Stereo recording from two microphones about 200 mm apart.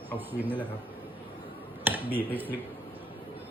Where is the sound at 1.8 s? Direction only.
10° right (ahead or behind).